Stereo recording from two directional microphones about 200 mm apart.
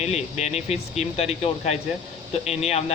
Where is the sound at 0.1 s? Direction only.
35° left (ahead or behind).